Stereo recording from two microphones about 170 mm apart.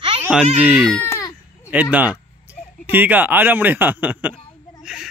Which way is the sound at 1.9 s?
10° right (ahead or behind).